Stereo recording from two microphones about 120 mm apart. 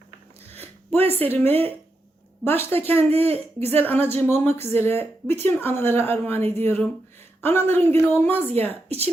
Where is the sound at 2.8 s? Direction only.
20° left (ahead or behind).